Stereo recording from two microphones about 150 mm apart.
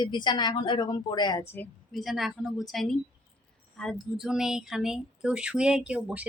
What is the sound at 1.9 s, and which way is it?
Speech, centre (ahead or behind).